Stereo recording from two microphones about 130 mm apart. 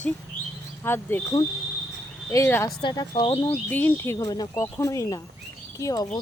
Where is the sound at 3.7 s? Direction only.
15° left (ahead or behind).